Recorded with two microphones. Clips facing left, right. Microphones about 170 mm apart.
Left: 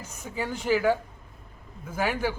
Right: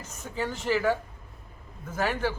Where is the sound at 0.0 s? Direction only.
10° left (ahead or behind).